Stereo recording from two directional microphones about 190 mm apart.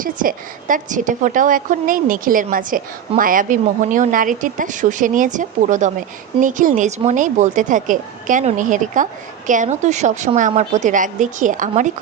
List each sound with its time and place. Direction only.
0.0 s a woman's voice: 45° right (ahead or behind)